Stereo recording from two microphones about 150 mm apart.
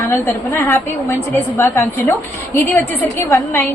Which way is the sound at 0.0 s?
20° left (ahead or behind).